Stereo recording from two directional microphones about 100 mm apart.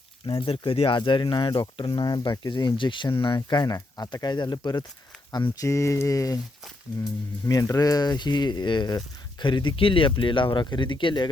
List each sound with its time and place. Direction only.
0.3 s speech: 55° left (ahead or behind)
0.9 s speech: 50° left (ahead or behind)
3.8 s speech: 40° left (ahead or behind)
5.6 s speech: 30° left (ahead or behind)
7.4 s speech: 35° left (ahead or behind); by 11.3 s 50° left (ahead or behind)